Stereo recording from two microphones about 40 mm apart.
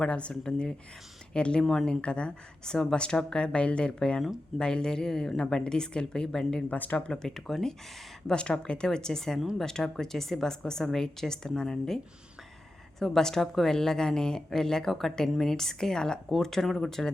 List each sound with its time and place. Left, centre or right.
0.0 s a woman's voice: left
6.7 s speech: left
7.1 s a woman's voice: centre
8.3 s a woman's voice: left
13.0 s a woman's voice: centre